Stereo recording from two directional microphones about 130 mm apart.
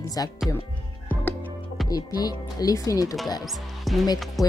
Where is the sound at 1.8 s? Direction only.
30° left (ahead or behind).